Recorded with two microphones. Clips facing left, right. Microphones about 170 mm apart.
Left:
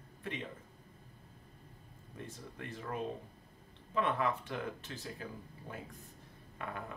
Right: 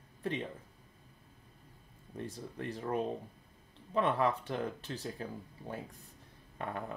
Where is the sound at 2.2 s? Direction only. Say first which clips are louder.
Right 5 dB; 35° right (ahead or behind).